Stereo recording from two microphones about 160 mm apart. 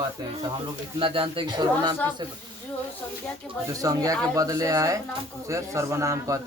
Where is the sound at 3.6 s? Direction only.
20° right (ahead or behind).